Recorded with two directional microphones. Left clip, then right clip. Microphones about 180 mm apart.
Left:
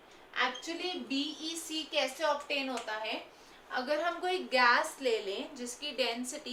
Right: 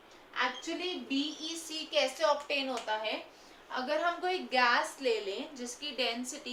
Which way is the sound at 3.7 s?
10° right (ahead or behind).